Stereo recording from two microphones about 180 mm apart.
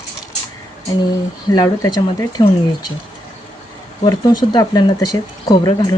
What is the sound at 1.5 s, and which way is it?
Speech, 20° left (ahead or behind).